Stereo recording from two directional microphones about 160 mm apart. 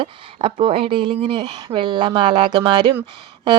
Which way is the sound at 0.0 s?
30° right (ahead or behind).